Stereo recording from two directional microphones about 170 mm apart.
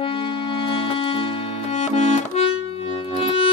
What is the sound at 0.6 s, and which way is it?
Music, 30° left (ahead or behind).